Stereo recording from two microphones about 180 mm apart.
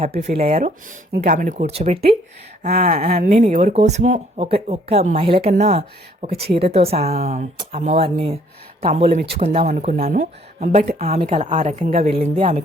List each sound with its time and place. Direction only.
0.1 s speech: 35° right (ahead or behind)
2.6 s speech: 55° right (ahead or behind)
3.3 s speech: 40° right (ahead or behind)